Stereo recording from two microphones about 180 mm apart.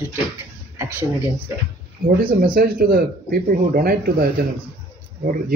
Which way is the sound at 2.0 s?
55° right (ahead or behind).